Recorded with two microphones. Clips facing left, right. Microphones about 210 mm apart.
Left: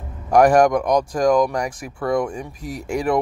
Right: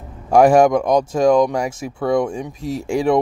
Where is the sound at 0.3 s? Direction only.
25° right (ahead or behind).